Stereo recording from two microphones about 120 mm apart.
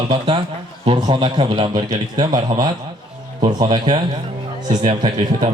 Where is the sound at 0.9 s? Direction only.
45° right (ahead or behind).